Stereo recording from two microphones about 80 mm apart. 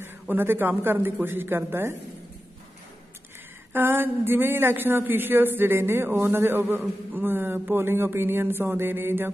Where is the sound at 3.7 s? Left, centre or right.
Right.